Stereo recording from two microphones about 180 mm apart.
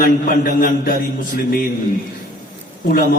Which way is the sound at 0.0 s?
55° left (ahead or behind).